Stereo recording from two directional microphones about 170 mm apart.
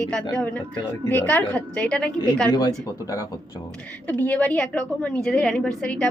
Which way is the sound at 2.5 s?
25° left (ahead or behind).